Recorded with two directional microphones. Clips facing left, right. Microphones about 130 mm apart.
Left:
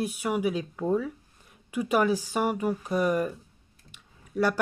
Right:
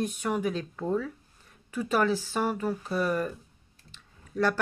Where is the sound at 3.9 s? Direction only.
10° left (ahead or behind).